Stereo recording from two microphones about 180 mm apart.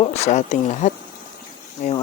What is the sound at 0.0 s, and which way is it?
Speech, 40° left (ahead or behind).